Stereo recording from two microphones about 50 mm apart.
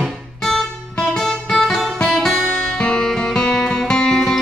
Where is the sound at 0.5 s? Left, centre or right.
Centre.